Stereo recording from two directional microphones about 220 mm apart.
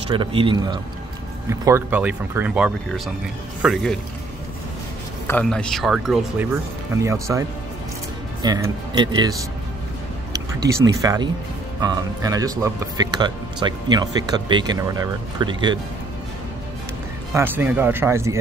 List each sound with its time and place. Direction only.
0.1 s speech: 25° right (ahead or behind); by 4.0 s centre (ahead or behind)
5.2 s speech: 5° left (ahead or behind); by 7.4 s 15° right (ahead or behind)
8.6 s speech: 20° right (ahead or behind)
10.6 s speech: 15° right (ahead or behind)
17.3 s speech: 10° right (ahead or behind)